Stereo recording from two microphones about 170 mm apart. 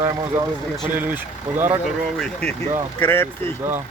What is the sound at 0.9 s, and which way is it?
Speech, 10° right (ahead or behind).